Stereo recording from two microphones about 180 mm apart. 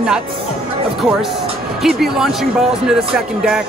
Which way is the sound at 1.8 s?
Centre (ahead or behind).